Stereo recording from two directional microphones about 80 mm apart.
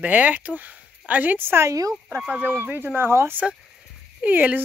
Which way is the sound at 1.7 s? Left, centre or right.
Right.